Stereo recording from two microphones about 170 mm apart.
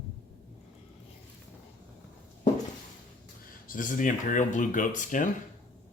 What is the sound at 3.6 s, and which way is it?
Speech, 50° left (ahead or behind).